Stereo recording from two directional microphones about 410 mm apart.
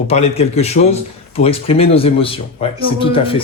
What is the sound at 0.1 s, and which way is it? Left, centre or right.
Speech, centre.